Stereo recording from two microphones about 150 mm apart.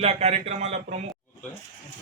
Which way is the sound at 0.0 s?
45° right (ahead or behind).